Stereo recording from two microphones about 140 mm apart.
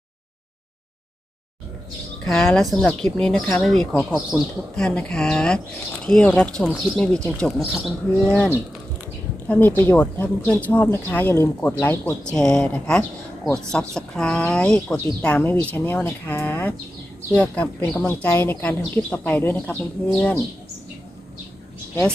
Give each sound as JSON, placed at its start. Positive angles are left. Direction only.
{"t": 2.2, "sound": "speech", "side_deg": 0}
{"t": 4.7, "sound": "a woman's voice", "side_deg": 5}